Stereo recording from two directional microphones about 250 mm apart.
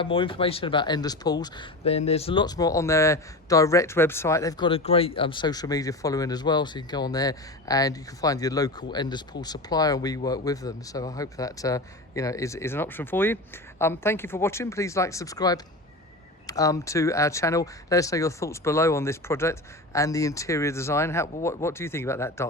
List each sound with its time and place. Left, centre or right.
0.0 s speech: left